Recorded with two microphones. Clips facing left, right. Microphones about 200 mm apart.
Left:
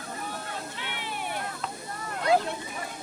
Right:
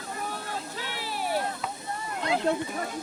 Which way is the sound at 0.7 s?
35° right (ahead or behind).